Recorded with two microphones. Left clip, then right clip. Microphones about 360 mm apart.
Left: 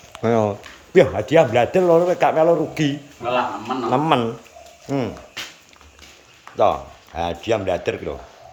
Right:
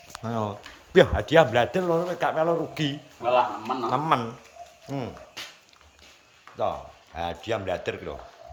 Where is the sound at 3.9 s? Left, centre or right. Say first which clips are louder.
Left 7 dB; centre.